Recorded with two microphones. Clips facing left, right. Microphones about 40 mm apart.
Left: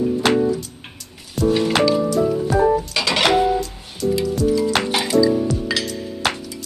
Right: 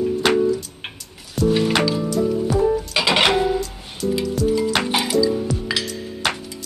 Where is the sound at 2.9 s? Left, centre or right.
Centre.